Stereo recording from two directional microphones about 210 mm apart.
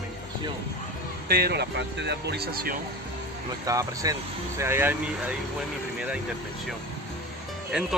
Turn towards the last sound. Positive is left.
turn(degrees=-5)  # may be behind; listen again after turning